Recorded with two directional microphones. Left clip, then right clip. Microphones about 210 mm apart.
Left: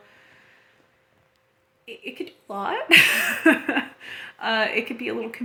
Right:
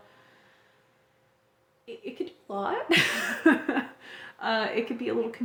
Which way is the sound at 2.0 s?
15° left (ahead or behind).